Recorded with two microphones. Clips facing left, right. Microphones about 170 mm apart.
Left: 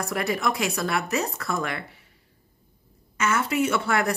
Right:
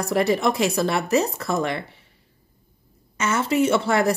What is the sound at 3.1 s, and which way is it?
Speech, 25° right (ahead or behind).